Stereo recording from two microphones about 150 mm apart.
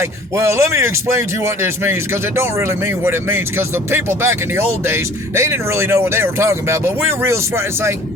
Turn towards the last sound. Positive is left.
turn(degrees=-15)  # may be behind; listen again after turning